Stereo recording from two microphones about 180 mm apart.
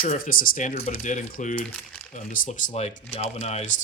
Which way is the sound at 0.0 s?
50° left (ahead or behind).